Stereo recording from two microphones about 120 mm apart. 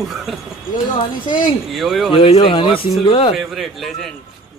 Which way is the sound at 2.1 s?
50° left (ahead or behind).